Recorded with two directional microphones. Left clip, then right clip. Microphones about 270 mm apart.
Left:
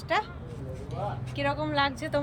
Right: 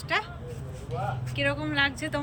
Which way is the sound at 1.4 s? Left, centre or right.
Centre.